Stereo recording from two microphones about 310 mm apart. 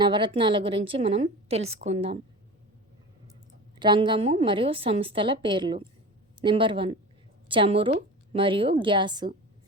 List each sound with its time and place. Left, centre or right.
0.0 s a woman's voice: centre
3.8 s a woman's voice: centre